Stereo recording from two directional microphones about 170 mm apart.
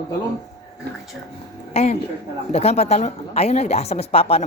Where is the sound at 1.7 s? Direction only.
35° left (ahead or behind).